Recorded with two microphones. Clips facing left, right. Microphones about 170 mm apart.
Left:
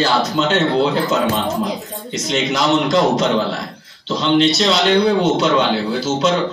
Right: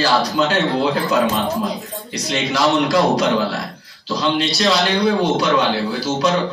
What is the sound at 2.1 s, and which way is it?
Speech, 20° left (ahead or behind).